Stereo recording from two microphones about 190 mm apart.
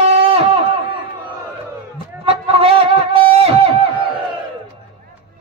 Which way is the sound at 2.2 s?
30° right (ahead or behind).